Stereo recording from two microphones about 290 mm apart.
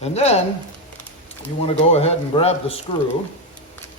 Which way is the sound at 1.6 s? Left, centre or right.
Left.